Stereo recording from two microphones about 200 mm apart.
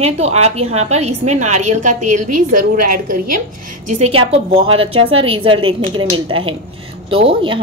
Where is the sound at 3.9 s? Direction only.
30° right (ahead or behind).